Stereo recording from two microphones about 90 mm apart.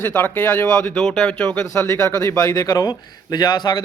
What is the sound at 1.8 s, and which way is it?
A man's voice, 35° left (ahead or behind).